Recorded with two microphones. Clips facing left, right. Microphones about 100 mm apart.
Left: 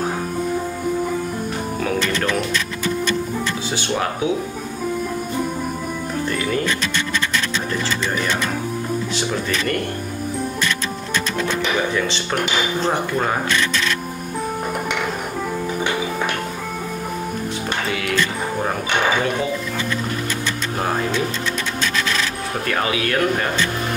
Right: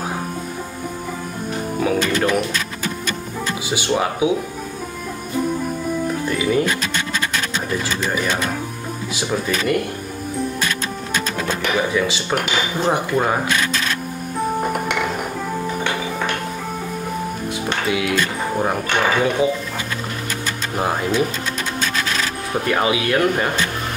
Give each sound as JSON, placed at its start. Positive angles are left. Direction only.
{"t": 1.9, "sound": "speech", "side_deg": -10}
{"t": 3.7, "sound": "speech", "side_deg": -10}
{"t": 6.2, "sound": "music", "side_deg": -10}
{"t": 9.1, "sound": "speech", "side_deg": -10}
{"t": 11.9, "sound": "speech", "side_deg": -5}
{"t": 17.8, "sound": "speech", "side_deg": -10}
{"t": 22.7, "sound": "speech", "side_deg": -15}